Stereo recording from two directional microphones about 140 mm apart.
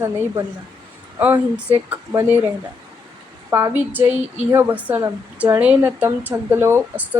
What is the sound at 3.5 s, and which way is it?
Speech, 15° right (ahead or behind).